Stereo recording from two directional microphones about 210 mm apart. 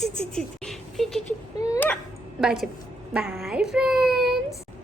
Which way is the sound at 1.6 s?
15° left (ahead or behind).